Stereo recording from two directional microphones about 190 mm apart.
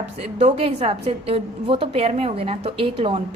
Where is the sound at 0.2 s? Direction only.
30° right (ahead or behind).